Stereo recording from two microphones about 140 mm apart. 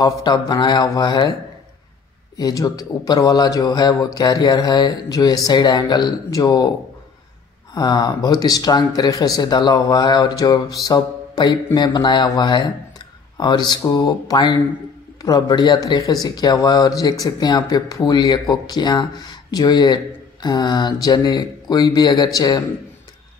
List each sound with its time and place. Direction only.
0.2 s speech: 30° left (ahead or behind)
2.3 s speech: 25° left (ahead or behind)
7.7 s speech: 30° left (ahead or behind)